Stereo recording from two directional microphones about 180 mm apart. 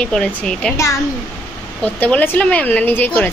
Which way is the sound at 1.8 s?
5° left (ahead or behind).